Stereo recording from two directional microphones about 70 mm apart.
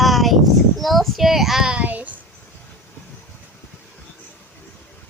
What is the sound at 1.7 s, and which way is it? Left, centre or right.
Child singing, right.